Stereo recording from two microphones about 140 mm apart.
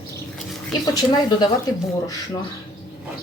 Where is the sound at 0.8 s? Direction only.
30° left (ahead or behind).